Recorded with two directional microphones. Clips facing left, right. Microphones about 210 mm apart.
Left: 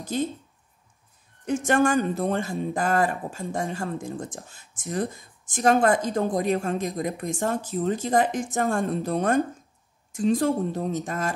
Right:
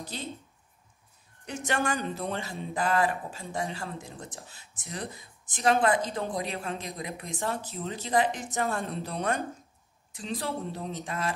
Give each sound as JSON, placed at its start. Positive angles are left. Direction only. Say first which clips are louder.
{"t": 0.1, "sound": "speech", "louder": "left 13 dB", "side_deg": 45}
{"t": 1.4, "sound": "speech", "louder": "left 9 dB", "side_deg": 50}